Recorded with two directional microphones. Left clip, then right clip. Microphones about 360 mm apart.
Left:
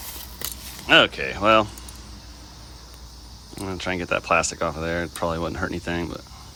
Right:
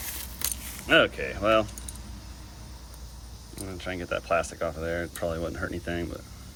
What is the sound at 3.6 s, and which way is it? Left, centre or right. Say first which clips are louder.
Speech: left 7 dB; centre.